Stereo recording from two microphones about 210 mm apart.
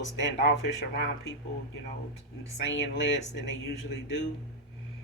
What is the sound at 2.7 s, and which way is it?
Speech, 60° left (ahead or behind).